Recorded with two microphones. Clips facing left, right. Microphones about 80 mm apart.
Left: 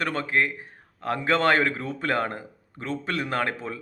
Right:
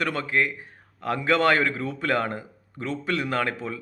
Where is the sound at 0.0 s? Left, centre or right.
Left.